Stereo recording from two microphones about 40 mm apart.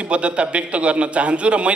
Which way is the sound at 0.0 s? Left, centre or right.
Right.